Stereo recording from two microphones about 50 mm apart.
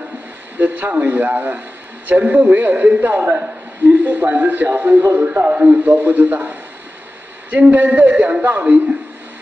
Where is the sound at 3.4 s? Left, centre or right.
Right.